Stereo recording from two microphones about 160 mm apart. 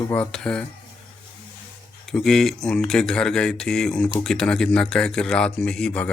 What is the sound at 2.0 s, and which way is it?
A man's voice, centre (ahead or behind).